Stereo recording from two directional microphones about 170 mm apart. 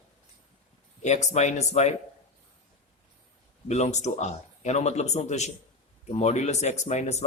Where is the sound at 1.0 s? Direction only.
40° left (ahead or behind).